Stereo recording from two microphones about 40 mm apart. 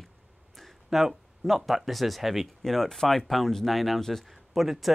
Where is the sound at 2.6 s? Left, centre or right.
Centre.